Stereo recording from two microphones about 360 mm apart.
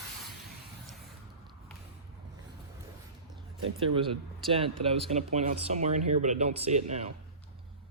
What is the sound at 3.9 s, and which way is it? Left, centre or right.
Speech, centre.